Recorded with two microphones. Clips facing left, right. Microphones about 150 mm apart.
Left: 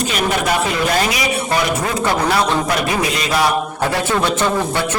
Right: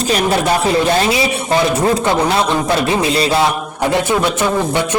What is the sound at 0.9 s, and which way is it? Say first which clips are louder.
Speech: right 3 dB; 30° right (ahead or behind).